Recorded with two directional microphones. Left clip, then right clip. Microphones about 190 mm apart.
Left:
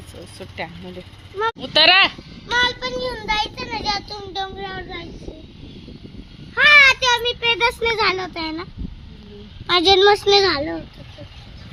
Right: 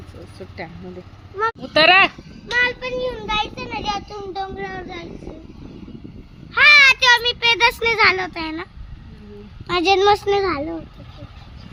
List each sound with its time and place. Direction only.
0.3 s speech: 5° left (ahead or behind)
2.8 s a child's voice: 50° right (ahead or behind)
6.5 s a child's voice: 10° right (ahead or behind)
7.8 s speech: 5° left (ahead or behind)
8.3 s speech: 20° left (ahead or behind)
9.6 s speech: 30° left (ahead or behind)
10.2 s a child's voice: 40° left (ahead or behind)